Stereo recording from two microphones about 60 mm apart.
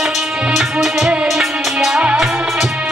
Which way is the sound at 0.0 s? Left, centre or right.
Centre.